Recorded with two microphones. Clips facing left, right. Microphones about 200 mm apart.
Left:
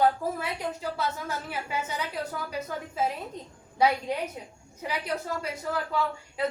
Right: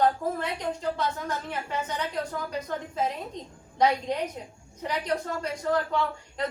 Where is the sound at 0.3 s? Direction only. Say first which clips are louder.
Right 2 dB; 5° left (ahead or behind).